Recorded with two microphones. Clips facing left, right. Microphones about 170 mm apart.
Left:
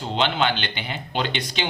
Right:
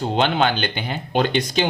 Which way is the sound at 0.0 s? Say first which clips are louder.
Right 4 dB; 50° right (ahead or behind).